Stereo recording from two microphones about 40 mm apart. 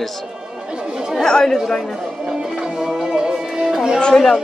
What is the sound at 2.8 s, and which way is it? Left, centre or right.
Music, centre.